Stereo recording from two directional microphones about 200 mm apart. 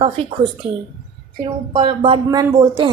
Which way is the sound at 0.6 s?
30° right (ahead or behind).